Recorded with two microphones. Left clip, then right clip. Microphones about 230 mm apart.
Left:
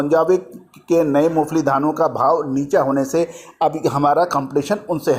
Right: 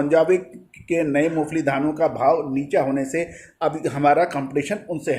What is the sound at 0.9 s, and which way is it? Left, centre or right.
A man's voice, centre.